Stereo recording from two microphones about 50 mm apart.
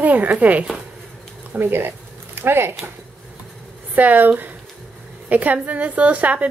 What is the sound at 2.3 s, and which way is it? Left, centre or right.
Speech, right.